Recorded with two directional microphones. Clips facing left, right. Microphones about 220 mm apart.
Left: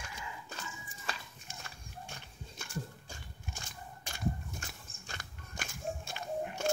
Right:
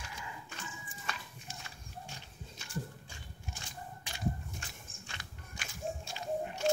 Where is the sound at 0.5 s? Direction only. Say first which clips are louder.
Left 1 dB; 35° left (ahead or behind); by 3.2 s 55° left (ahead or behind).